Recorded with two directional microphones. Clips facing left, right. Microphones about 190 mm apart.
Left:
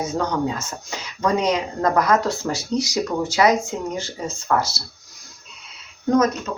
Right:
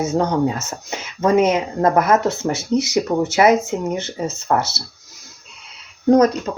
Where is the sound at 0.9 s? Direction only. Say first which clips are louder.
Right 4 dB; 25° right (ahead or behind).